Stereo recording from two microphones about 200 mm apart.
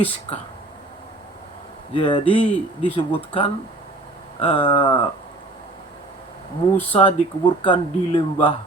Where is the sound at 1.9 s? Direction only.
25° left (ahead or behind).